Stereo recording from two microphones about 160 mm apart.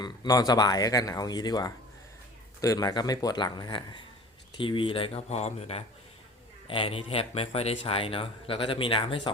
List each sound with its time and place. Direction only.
0.0 s speech: 25° left (ahead or behind)